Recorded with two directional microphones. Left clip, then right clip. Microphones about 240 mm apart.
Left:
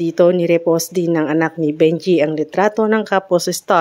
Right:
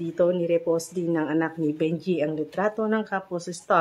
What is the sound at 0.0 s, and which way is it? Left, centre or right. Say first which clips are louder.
Speech: left 10 dB; left.